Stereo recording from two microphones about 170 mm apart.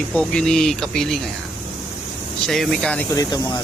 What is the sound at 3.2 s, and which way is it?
Speech, 20° left (ahead or behind).